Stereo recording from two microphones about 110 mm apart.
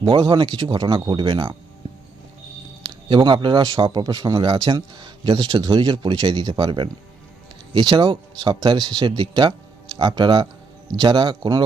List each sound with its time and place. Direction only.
0.1 s speech: 45° right (ahead or behind)
3.1 s a man's voice: 45° right (ahead or behind)